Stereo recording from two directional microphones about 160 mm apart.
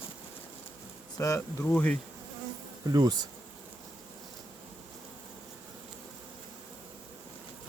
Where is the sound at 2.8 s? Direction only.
25° right (ahead or behind).